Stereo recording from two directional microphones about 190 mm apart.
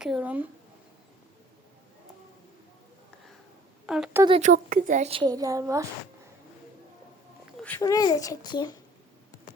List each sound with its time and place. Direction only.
0.0 s speech: 5° right (ahead or behind)
3.8 s a woman's voice: 5° right (ahead or behind)
4.3 s a woman's voice: 40° right (ahead or behind); by 5.8 s 15° right (ahead or behind)
7.6 s a child's voice: 15° left (ahead or behind)